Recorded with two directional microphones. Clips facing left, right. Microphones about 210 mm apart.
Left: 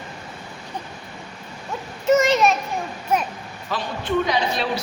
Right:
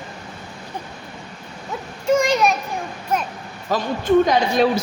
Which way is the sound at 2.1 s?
5° left (ahead or behind).